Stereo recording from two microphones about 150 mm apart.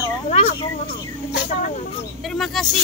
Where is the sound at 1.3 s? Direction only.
65° left (ahead or behind).